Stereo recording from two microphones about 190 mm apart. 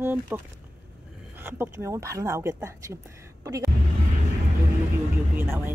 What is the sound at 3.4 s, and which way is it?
Music, 15° right (ahead or behind).